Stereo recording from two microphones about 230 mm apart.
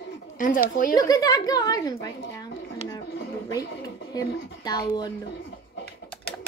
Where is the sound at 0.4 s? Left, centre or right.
Left.